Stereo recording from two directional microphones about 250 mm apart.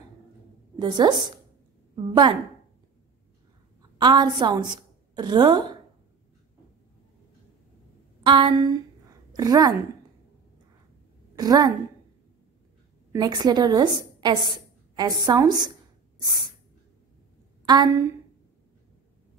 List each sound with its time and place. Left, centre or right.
0.7 s a woman's voice: centre
2.0 s a sound: centre
4.0 s a woman's voice: centre
8.2 s a sound: centre
9.3 s a woman's voice: centre
11.3 s a woman's voice: centre
13.1 s a woman's voice: centre
17.6 s a woman's voice: centre